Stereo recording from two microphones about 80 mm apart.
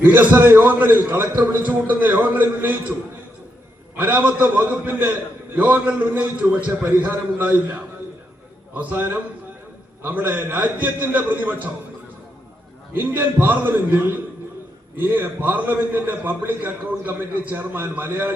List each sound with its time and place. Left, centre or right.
0.0 s a man's voice: right
3.9 s a man's voice: right
12.9 s a man's voice: right